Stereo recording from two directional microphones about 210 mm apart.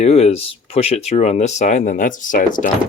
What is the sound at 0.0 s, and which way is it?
Speech, 30° left (ahead or behind).